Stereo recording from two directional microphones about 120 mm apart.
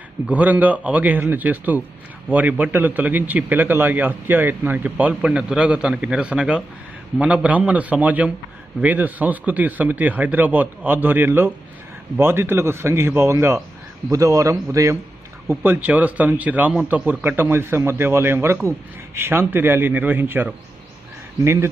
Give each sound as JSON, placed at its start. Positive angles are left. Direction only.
{"t": 0.3, "sound": "a man's voice", "side_deg": -15}